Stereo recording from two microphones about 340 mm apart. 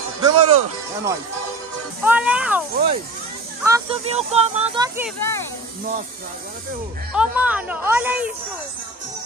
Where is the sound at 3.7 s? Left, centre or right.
Centre.